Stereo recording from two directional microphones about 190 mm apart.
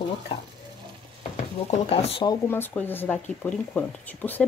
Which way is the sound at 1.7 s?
30° left (ahead or behind).